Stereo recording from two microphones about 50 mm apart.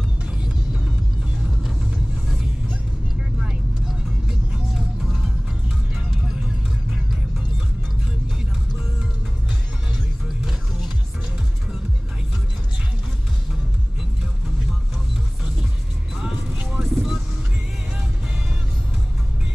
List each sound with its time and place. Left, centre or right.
0.2 s music: centre
4.3 s music: centre
10.2 s music: centre
16.6 s music: centre